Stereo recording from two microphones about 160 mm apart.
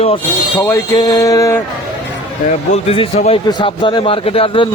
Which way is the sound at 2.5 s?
40° left (ahead or behind).